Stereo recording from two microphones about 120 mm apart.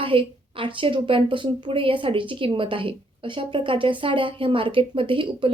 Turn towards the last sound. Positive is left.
turn(degrees=-45)  # may be behind; listen again after turning